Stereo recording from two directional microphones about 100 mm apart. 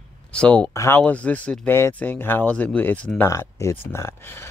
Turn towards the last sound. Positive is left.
turn(degrees=25)  # may be behind; listen again after turning